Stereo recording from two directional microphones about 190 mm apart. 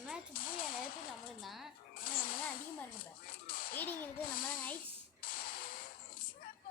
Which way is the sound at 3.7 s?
10° left (ahead or behind).